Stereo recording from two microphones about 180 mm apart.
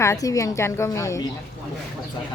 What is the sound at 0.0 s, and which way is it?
A woman's voice, 15° left (ahead or behind).